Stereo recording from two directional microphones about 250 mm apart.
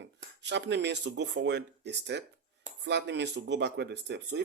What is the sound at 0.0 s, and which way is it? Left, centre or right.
Speech, right.